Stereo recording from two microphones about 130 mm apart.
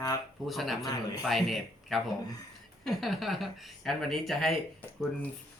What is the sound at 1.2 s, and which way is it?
Speech, centre (ahead or behind).